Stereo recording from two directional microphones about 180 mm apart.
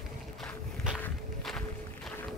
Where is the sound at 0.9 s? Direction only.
5° left (ahead or behind).